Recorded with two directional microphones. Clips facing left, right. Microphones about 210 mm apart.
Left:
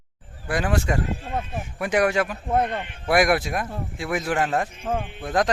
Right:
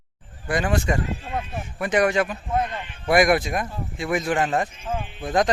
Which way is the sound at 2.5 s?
60° left (ahead or behind).